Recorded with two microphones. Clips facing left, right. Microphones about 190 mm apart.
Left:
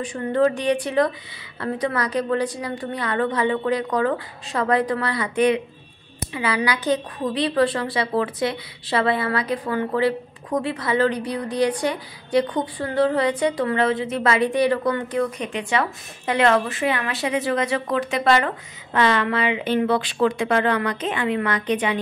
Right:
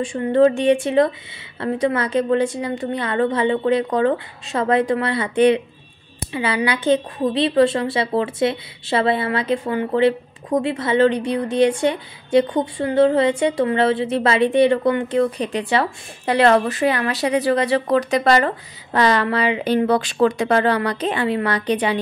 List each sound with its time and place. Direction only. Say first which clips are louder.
0.0 s a woman's voice: right 5 dB; 25° right (ahead or behind)